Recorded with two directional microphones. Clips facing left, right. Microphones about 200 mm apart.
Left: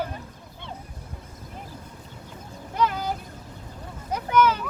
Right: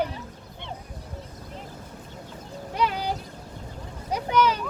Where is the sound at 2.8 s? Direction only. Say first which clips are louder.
Left 1 dB; 15° right (ahead or behind).